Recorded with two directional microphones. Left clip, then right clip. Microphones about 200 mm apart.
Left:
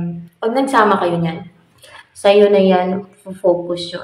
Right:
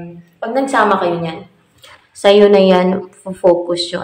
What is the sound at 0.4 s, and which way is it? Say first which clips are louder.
A woman's voice: even; centre (ahead or behind).